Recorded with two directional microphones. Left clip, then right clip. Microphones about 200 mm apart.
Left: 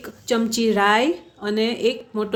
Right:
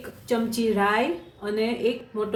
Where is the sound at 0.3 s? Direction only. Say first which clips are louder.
Left 4 dB; 45° left (ahead or behind).